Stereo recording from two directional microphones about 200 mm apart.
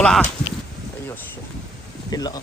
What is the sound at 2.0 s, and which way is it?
Speech, 20° left (ahead or behind).